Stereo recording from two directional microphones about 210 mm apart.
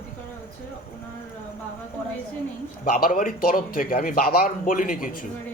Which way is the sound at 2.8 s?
45° left (ahead or behind).